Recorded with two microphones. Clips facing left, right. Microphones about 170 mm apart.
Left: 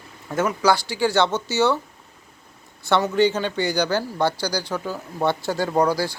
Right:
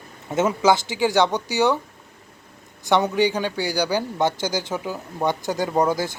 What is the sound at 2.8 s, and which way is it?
A man's voice, 15° right (ahead or behind).